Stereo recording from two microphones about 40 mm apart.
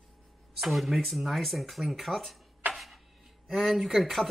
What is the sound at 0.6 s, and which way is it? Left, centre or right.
Speech, centre.